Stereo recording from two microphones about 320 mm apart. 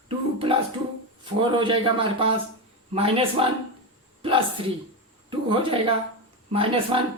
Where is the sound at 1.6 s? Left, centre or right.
Centre.